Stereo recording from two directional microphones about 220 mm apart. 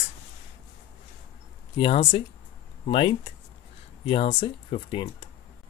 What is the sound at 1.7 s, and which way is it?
Speech, 25° left (ahead or behind).